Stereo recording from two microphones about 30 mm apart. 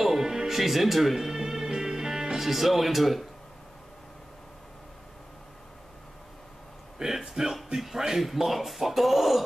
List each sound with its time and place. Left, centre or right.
0.0 s music: centre
0.6 s speech: centre
1.1 s music: centre
2.3 s speech: centre
7.0 s a sound: centre
7.5 s speech: centre